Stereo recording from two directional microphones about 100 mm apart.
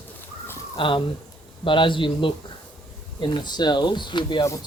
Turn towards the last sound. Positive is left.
turn(degrees=50)  # may be behind; listen again after turning